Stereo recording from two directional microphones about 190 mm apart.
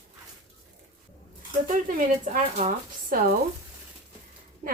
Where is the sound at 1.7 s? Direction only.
45° right (ahead or behind).